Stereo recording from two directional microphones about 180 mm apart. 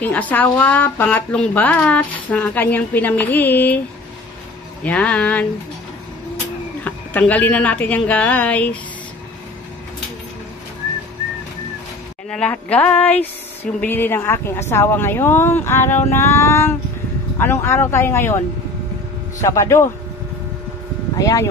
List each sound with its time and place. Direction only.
0.0 s a woman's voice: 10° left (ahead or behind)
4.8 s a woman's voice: 5° left (ahead or behind)
6.8 s a woman's voice: 10° left (ahead or behind)
12.3 s a woman's voice: 5° left (ahead or behind)
19.4 s a woman's voice: 15° left (ahead or behind)
21.2 s speech: 20° left (ahead or behind)